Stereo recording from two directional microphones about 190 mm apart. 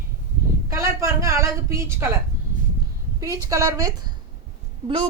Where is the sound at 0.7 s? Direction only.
15° right (ahead or behind).